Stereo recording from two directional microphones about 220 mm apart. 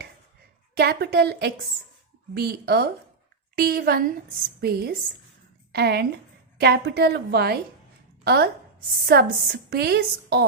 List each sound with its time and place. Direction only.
0.8 s a woman's voice: 45° right (ahead or behind)